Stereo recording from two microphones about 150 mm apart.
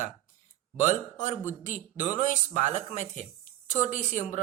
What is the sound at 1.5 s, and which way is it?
A woman's voice, 55° left (ahead or behind).